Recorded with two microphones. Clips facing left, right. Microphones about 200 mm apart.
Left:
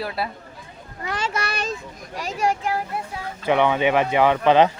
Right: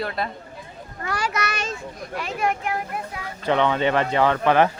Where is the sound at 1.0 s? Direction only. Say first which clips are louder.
Even; 20° left (ahead or behind).